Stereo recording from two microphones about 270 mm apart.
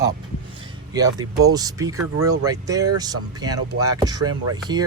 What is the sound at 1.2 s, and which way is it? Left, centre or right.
Speech, right.